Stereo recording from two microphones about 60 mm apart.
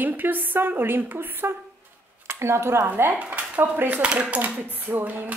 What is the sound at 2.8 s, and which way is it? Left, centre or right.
Speech, right.